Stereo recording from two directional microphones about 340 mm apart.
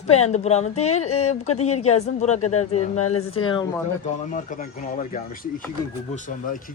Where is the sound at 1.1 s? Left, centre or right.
Left.